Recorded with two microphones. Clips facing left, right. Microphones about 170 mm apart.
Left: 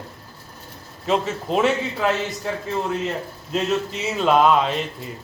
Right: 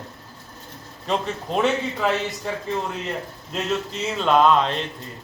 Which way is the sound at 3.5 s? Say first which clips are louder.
Left 3 dB; 5° left (ahead or behind).